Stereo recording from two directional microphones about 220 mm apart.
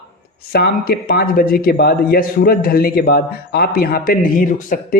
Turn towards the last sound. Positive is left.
turn(degrees=40)  # may be behind; listen again after turning